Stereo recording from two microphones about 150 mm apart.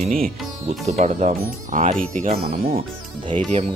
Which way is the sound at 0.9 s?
50° right (ahead or behind).